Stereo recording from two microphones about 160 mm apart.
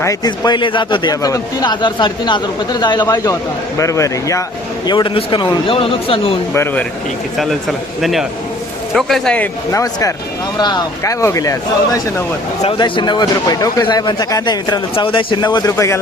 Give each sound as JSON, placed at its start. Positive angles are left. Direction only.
{"t": 0.0, "sound": "speech", "side_deg": 20}
{"t": 6.5, "sound": "speech", "side_deg": 15}
{"t": 9.0, "sound": "speech", "side_deg": 0}
{"t": 9.7, "sound": "speech", "side_deg": 20}
{"t": 12.6, "sound": "speech", "side_deg": 30}